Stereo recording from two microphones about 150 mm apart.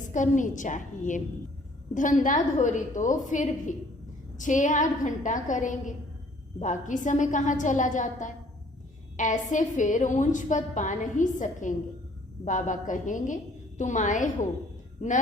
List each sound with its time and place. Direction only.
0.1 s a woman's voice: 55° left (ahead or behind)